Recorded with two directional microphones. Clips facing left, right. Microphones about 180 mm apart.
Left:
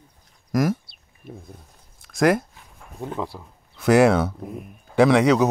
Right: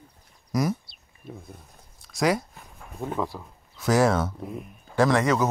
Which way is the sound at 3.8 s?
65° left (ahead or behind).